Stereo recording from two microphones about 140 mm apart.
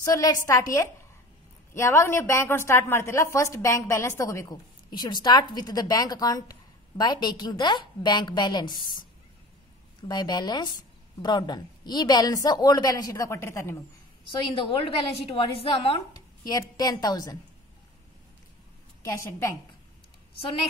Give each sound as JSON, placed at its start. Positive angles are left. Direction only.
{"t": 0.0, "sound": "a woman's voice", "side_deg": 25}
{"t": 10.0, "sound": "a woman's voice", "side_deg": 30}
{"t": 14.5, "sound": "a woman's voice", "side_deg": 40}
{"t": 16.4, "sound": "a woman's voice", "side_deg": 30}